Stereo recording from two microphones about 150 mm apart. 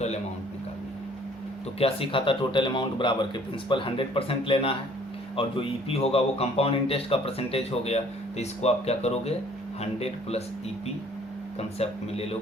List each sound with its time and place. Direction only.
1.8 s a man's voice: 35° left (ahead or behind)
11.8 s speech: 45° left (ahead or behind)